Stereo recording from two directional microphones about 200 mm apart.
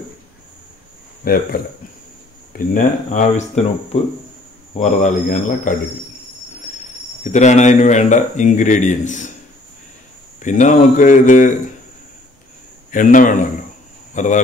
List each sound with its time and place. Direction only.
1.2 s speech: 45° left (ahead or behind)
7.2 s speech: 35° left (ahead or behind)
10.4 s speech: 40° left (ahead or behind)
12.9 s speech: 40° left (ahead or behind)